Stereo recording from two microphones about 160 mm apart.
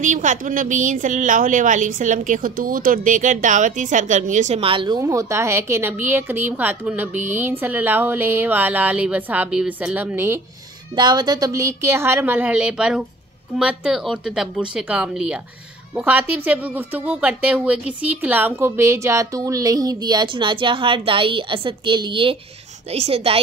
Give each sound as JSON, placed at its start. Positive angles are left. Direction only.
{"t": 0.0, "sound": "a woman's voice", "side_deg": -50}
{"t": 11.0, "sound": "a woman's voice", "side_deg": -25}